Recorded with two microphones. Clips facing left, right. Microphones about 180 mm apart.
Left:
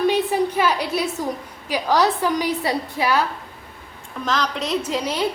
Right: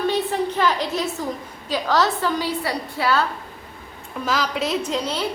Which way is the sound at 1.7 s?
15° left (ahead or behind).